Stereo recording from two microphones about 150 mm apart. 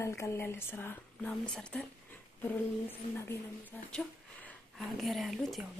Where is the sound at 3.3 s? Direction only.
10° left (ahead or behind).